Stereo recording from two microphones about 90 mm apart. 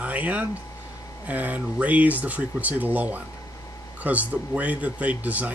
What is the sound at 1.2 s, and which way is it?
Speech, 15° right (ahead or behind).